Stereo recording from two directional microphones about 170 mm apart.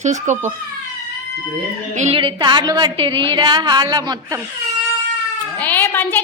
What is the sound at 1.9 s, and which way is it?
Speech, 45° right (ahead or behind).